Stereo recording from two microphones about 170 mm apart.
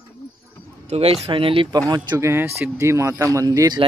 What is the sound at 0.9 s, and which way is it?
Speech, 35° right (ahead or behind).